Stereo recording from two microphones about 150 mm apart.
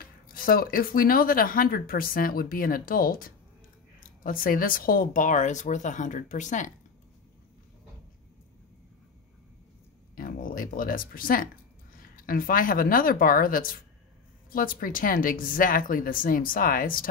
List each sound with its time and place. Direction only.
0.0 s speech: 75° left (ahead or behind); by 6.7 s 55° left (ahead or behind)
10.1 s a sound: 70° left (ahead or behind)
12.0 s speech: 70° left (ahead or behind)